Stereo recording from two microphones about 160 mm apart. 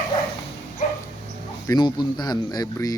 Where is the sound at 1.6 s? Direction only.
25° left (ahead or behind).